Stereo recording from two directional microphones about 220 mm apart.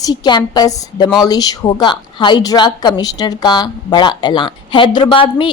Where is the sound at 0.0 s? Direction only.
20° left (ahead or behind).